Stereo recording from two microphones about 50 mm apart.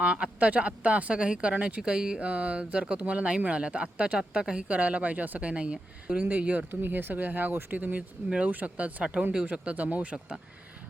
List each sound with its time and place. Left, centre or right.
0.0 s speech: right
4.7 s speech: right
6.7 s speech: right